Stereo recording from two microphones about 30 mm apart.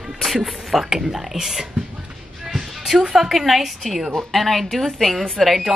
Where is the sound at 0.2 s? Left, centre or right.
Centre.